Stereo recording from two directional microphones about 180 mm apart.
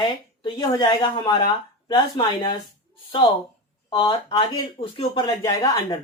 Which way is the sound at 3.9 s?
20° left (ahead or behind).